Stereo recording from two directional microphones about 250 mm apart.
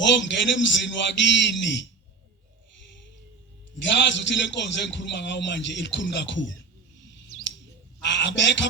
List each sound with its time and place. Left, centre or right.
0.0 s a man's voice: left
3.8 s a man's voice: left
8.0 s a man's voice: left